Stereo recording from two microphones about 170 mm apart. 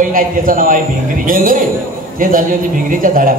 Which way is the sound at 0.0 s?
55° right (ahead or behind).